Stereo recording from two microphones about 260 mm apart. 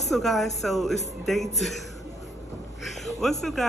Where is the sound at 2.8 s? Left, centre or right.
Centre.